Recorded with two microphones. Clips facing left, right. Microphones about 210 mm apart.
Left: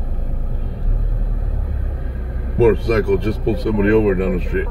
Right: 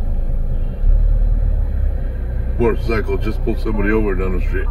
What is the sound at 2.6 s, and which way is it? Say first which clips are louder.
Speech: left 3 dB; 30° left (ahead or behind).